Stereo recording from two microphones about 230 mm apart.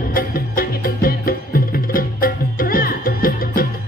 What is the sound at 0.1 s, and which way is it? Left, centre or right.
Music, left.